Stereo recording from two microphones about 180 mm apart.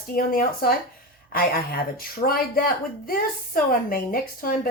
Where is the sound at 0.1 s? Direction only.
55° left (ahead or behind).